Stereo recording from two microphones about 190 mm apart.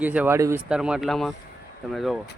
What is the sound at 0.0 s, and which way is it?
Speech, 10° right (ahead or behind).